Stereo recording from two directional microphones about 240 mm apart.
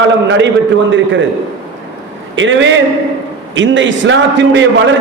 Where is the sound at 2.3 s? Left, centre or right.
Right.